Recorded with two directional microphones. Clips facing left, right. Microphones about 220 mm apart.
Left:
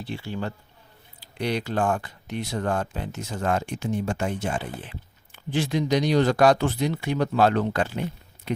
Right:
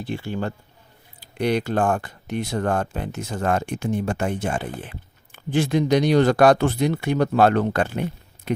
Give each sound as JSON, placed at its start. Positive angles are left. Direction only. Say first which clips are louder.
{"t": 0.0, "sound": "speech", "louder": "right 4 dB", "side_deg": -50}